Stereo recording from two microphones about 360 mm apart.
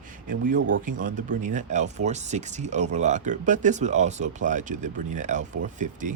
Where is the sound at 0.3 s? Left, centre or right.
Right.